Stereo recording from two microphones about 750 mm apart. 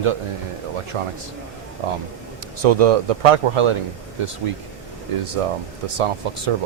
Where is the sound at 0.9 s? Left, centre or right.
Right.